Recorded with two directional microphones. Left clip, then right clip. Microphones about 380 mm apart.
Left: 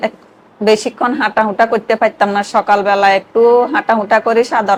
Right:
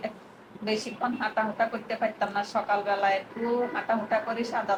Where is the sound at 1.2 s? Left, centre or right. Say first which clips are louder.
Left 15 dB; left.